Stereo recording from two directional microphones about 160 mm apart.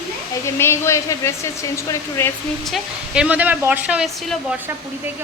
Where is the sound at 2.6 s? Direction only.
Centre (ahead or behind).